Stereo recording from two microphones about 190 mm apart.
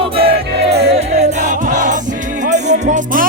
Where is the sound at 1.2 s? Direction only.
40° right (ahead or behind).